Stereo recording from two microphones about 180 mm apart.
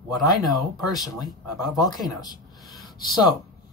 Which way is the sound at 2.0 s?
20° left (ahead or behind).